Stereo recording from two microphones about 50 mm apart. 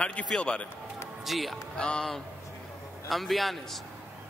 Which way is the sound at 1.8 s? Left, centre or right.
Centre.